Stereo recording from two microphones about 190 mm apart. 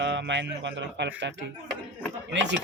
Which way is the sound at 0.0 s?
70° right (ahead or behind).